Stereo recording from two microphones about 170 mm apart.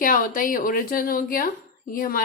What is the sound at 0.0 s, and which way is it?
A woman's voice, 55° left (ahead or behind).